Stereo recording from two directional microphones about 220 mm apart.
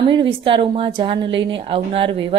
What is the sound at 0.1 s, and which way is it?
A woman's voice, 25° right (ahead or behind).